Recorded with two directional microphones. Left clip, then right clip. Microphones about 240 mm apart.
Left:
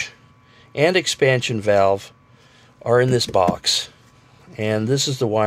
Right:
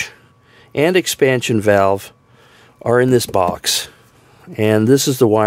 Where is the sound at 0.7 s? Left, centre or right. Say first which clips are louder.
Right 3 dB; right.